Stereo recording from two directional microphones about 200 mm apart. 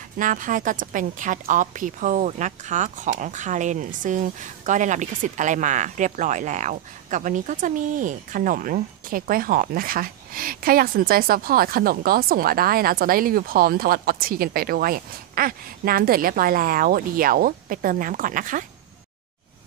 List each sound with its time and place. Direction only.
0.2 s a woman's voice: 40° right (ahead or behind)